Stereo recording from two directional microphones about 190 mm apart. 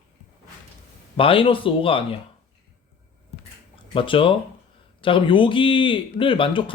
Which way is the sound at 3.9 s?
25° left (ahead or behind).